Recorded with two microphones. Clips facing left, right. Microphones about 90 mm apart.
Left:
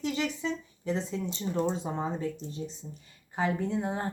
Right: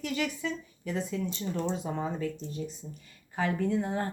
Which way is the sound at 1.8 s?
30° left (ahead or behind).